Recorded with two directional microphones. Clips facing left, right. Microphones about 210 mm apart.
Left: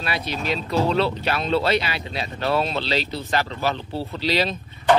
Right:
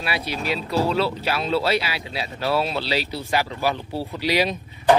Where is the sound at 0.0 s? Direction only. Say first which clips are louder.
Even; 10° right (ahead or behind).